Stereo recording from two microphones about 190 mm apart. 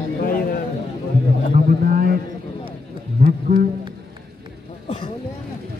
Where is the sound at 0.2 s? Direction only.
50° left (ahead or behind).